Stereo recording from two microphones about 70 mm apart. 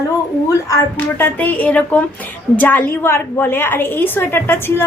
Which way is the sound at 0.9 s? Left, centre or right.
Left.